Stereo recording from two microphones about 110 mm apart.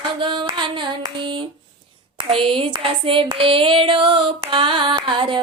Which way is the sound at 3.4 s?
55° right (ahead or behind).